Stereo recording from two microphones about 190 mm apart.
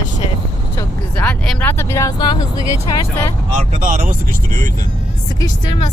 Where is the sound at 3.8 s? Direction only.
45° right (ahead or behind).